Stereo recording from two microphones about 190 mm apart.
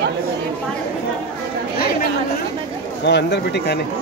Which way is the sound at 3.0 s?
65° left (ahead or behind).